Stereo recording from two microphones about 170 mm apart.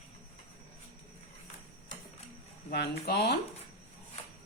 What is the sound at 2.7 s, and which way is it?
Speech, 70° left (ahead or behind).